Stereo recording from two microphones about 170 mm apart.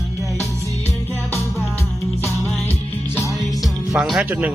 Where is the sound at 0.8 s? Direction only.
15° left (ahead or behind).